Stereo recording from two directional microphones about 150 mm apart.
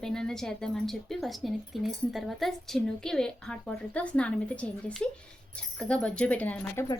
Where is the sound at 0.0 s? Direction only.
5° left (ahead or behind).